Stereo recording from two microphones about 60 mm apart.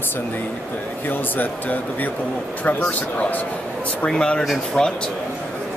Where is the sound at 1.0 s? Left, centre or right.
Left.